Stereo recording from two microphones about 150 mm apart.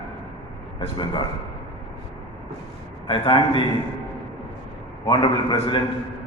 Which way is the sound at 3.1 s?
35° left (ahead or behind).